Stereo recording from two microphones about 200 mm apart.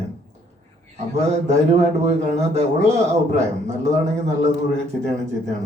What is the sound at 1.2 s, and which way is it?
A man's voice, 35° right (ahead or behind).